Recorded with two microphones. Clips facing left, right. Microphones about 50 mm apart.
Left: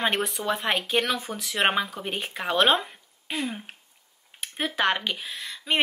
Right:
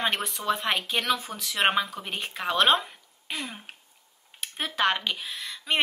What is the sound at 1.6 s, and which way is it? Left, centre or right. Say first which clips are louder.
Speech: even; centre.